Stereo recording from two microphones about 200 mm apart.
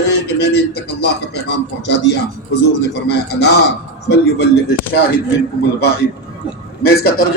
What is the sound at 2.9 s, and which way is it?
Speech, 55° left (ahead or behind).